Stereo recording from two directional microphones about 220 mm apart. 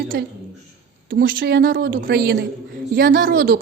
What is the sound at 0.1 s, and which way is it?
Speech, 50° right (ahead or behind).